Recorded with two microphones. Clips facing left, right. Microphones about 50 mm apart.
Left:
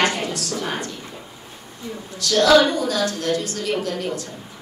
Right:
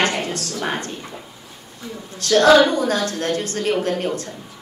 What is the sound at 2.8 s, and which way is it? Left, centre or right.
Speech, right.